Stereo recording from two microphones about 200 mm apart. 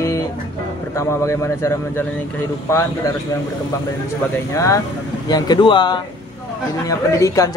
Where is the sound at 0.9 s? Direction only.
15° left (ahead or behind).